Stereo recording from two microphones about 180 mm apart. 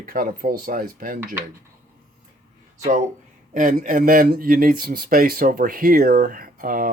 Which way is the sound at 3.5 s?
45° right (ahead or behind).